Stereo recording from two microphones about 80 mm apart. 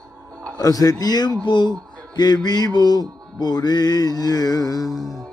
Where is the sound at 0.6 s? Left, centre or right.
Left.